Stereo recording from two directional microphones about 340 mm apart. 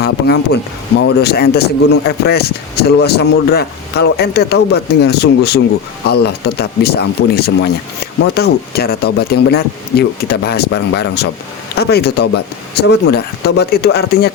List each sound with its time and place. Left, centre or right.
0.0 s speech: left